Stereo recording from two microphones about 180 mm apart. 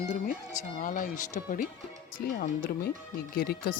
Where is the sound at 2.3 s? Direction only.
60° left (ahead or behind).